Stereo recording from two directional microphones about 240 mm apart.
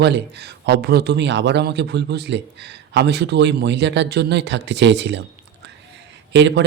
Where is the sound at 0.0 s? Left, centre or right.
Right.